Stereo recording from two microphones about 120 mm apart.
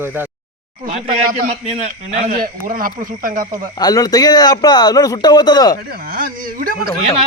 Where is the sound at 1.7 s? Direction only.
65° right (ahead or behind).